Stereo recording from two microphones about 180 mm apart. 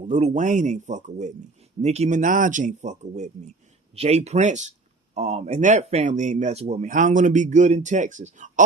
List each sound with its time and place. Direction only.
0.1 s speech: 45° right (ahead or behind)